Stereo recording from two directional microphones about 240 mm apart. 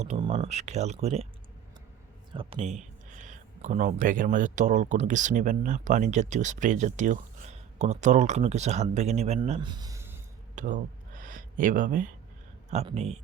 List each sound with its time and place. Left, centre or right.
0.0 s speech: right
2.3 s speech: right
10.5 s a sound: right
12.7 s speech: right